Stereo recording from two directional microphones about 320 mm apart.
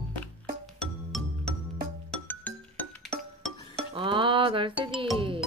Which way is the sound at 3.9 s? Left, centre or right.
Centre.